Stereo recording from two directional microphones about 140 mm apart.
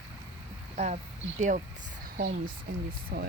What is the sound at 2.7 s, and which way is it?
Speech, 90° right.